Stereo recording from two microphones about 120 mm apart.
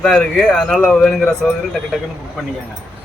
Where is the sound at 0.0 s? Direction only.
Centre (ahead or behind).